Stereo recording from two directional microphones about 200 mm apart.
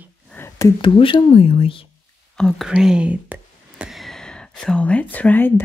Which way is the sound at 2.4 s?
Centre (ahead or behind).